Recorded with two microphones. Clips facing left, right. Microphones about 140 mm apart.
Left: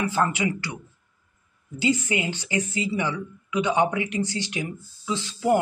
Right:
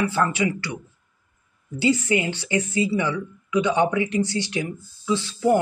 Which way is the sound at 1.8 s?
20° left (ahead or behind).